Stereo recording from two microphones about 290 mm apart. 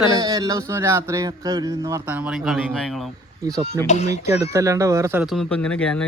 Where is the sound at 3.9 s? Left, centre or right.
Left.